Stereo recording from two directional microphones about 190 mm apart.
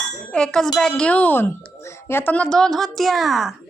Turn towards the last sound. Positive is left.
turn(degrees=0)  # may be behind; listen again after turning